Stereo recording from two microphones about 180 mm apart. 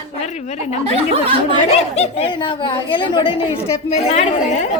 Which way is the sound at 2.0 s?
30° left (ahead or behind).